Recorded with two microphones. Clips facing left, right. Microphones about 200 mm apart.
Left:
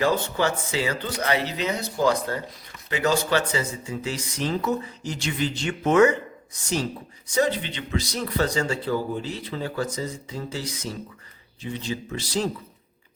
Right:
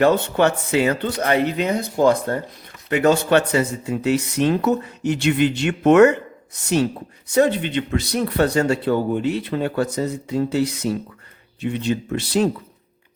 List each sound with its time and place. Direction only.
0.0 s speech: 60° right (ahead or behind)